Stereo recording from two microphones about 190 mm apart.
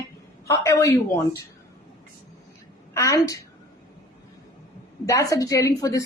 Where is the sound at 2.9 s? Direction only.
15° left (ahead or behind).